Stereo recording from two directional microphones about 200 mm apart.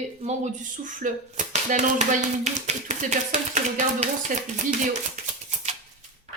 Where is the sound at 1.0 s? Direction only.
40° right (ahead or behind).